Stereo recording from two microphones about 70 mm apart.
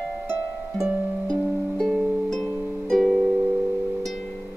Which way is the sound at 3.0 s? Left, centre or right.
Centre.